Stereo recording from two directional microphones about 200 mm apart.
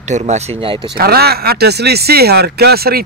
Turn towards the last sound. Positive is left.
turn(degrees=-50)  # may be behind; listen again after turning